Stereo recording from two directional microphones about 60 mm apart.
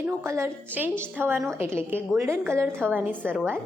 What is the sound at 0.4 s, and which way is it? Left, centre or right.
Speech, right.